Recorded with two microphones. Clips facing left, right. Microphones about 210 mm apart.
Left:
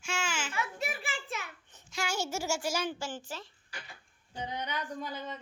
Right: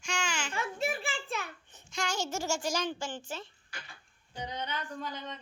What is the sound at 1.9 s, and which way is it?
A child's voice, 5° left (ahead or behind).